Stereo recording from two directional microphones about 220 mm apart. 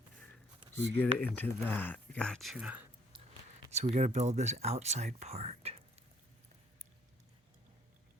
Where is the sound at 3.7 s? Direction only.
30° right (ahead or behind).